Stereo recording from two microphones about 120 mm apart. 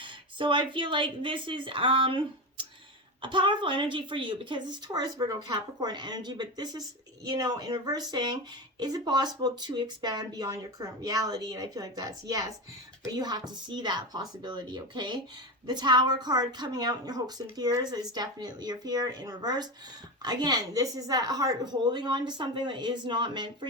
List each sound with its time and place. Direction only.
0.0 s a woman's voice: 45° right (ahead or behind)